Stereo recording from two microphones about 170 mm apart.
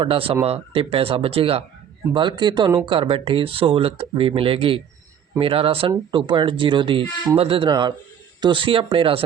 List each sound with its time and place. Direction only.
0.0 s speech: 30° right (ahead or behind)